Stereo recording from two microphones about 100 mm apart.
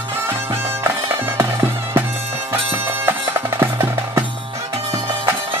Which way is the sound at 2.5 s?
25° right (ahead or behind).